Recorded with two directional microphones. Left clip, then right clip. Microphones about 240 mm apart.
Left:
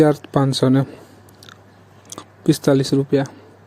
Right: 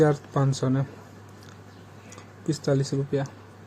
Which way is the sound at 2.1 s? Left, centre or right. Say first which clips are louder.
Left 12 dB; left.